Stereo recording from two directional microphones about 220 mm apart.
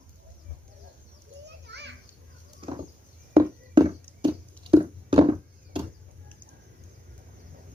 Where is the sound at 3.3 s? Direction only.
25° right (ahead or behind).